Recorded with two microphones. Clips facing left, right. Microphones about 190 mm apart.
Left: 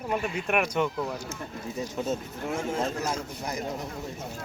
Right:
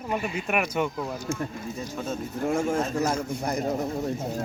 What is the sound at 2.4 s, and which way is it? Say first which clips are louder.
A man's voice: right 4 dB; 50° right (ahead or behind).